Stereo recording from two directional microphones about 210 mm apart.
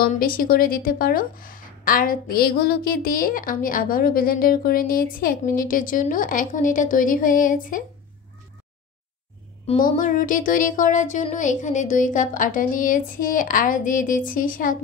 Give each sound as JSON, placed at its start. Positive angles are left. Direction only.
{"t": 0.0, "sound": "speech", "side_deg": 45}
{"t": 9.7, "sound": "speech", "side_deg": 40}